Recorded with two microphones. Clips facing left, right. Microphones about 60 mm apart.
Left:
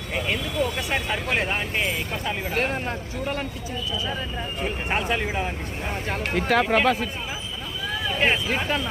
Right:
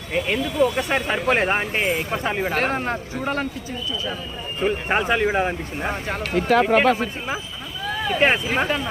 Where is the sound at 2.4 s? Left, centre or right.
Right.